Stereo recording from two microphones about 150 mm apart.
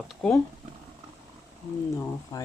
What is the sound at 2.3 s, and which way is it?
Speech, 20° left (ahead or behind).